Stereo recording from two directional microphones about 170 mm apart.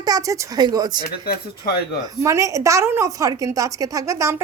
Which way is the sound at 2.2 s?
20° right (ahead or behind).